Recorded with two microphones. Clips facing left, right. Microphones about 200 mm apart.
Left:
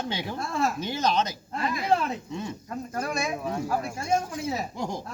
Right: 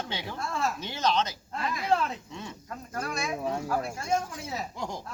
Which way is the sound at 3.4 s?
25° right (ahead or behind).